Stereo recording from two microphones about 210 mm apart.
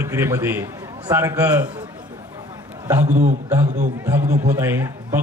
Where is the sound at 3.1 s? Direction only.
35° right (ahead or behind).